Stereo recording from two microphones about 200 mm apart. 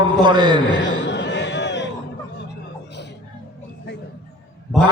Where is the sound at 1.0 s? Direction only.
65° left (ahead or behind).